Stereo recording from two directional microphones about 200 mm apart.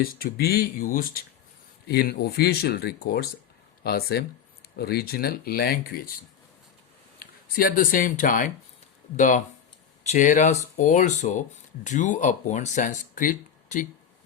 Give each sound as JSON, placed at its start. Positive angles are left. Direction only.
{"t": 0.0, "sound": "speech", "side_deg": 50}
{"t": 7.4, "sound": "speech", "side_deg": 45}